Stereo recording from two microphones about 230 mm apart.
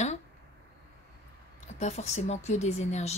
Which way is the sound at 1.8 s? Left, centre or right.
Left.